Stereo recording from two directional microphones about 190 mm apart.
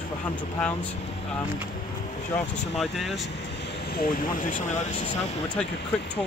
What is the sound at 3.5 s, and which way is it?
Speech, 65° left (ahead or behind).